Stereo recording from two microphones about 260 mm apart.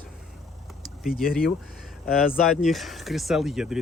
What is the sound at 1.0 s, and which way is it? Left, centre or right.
Speech, centre.